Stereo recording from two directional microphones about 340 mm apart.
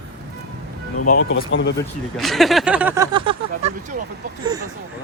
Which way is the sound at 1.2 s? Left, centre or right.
Left.